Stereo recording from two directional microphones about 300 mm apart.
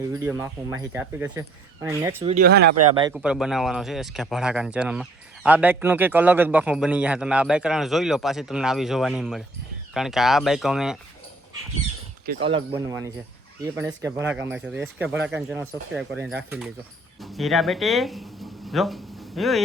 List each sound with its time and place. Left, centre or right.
0.1 s speech: centre
2.2 s speech: right
2.9 s speech: centre
3.2 s speech: centre
12.3 s speech: right
12.7 s speech: centre